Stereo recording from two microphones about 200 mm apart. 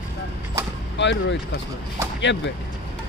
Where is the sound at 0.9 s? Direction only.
65° left (ahead or behind).